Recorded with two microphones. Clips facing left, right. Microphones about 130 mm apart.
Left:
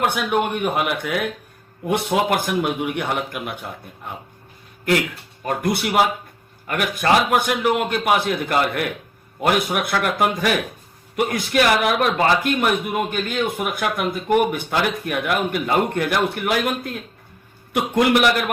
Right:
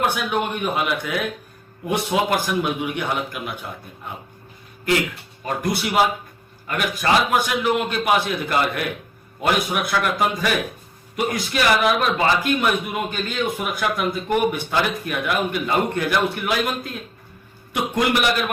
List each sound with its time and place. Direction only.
0.0 s a man's voice: 55° left (ahead or behind)
5.5 s a man's voice: 55° left (ahead or behind)